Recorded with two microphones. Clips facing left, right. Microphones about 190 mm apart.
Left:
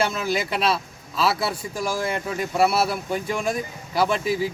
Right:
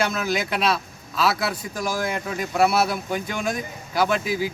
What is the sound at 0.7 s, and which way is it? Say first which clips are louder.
Speech: even; 30° left (ahead or behind).